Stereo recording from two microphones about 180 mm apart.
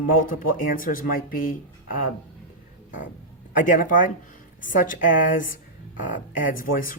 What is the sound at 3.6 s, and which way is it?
Speech, 45° left (ahead or behind).